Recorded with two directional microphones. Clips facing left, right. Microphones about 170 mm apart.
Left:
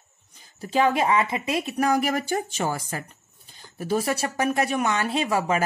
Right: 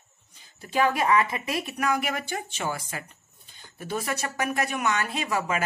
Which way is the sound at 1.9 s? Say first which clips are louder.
Left 5 dB; 40° left (ahead or behind).